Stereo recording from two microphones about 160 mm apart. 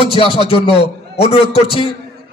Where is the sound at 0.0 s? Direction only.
35° left (ahead or behind).